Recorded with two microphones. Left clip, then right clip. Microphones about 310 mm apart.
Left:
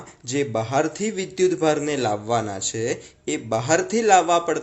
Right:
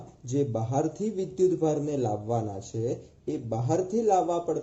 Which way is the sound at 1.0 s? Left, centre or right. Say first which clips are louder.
Left 4 dB; centre.